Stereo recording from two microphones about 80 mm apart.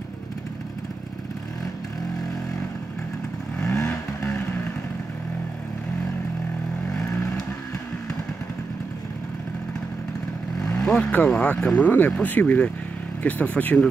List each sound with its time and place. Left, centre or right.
3.5 s vehicle: centre
10.7 s speech: centre
11.7 s speech: left